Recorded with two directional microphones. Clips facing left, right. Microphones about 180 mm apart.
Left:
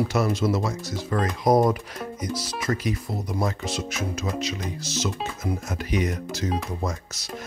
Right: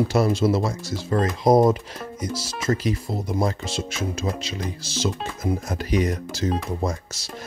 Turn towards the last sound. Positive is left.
turn(degrees=-30)  # may be behind; listen again after turning